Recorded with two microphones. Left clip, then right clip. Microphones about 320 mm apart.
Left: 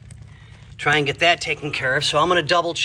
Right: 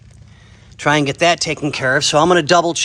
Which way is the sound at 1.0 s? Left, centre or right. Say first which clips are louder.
Right 3 dB; centre.